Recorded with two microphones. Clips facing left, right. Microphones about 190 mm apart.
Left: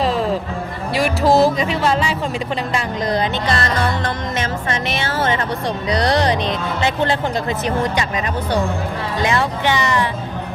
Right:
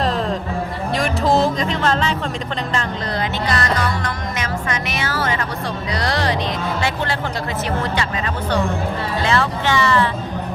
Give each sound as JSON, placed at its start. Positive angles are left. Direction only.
{"t": 0.0, "sound": "music", "side_deg": 0}
{"t": 0.9, "sound": "a sound", "side_deg": 5}
{"t": 1.5, "sound": "speech", "side_deg": 10}
{"t": 3.5, "sound": "music", "side_deg": 30}
{"t": 5.9, "sound": "speech", "side_deg": 20}
{"t": 9.2, "sound": "speech", "side_deg": 15}